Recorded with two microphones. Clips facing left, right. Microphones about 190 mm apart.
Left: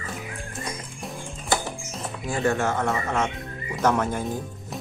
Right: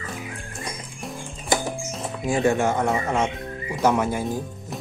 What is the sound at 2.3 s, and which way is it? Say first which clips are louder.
Speech: right 3 dB; 15° right (ahead or behind).